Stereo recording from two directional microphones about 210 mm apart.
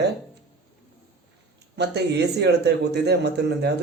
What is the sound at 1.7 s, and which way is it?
Speech, 55° right (ahead or behind).